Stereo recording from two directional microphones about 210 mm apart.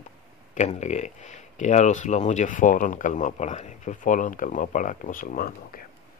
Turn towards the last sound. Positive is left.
turn(degrees=45)  # may be behind; listen again after turning